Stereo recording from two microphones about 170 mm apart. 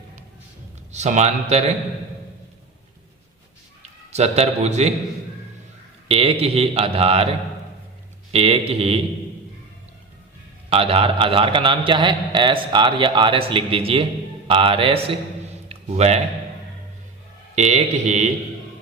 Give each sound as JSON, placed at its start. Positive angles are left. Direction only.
{"t": 0.9, "sound": "a man's voice", "side_deg": -40}
{"t": 3.8, "sound": "a man's voice", "side_deg": -40}
{"t": 6.1, "sound": "a man's voice", "side_deg": -35}
{"t": 10.7, "sound": "a man's voice", "side_deg": -35}
{"t": 17.5, "sound": "speech", "side_deg": -40}